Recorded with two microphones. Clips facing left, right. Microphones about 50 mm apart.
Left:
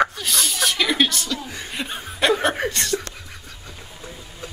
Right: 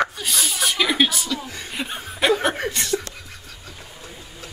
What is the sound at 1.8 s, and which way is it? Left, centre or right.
Chuckle, centre.